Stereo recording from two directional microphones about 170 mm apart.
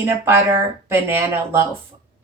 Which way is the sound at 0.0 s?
15° right (ahead or behind).